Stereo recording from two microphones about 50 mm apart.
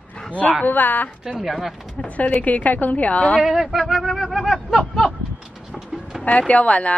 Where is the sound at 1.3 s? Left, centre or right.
Centre.